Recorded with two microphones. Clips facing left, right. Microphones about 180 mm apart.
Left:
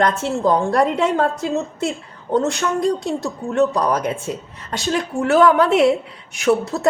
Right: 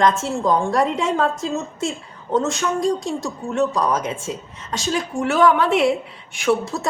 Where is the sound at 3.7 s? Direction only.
65° left (ahead or behind).